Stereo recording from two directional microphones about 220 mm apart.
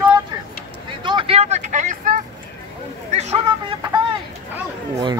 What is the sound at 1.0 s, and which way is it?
Vehicle, 20° right (ahead or behind).